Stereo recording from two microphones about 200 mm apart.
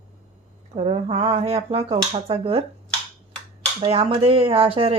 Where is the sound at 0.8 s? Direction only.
30° right (ahead or behind).